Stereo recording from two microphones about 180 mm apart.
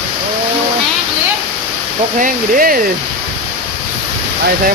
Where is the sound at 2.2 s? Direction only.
50° right (ahead or behind).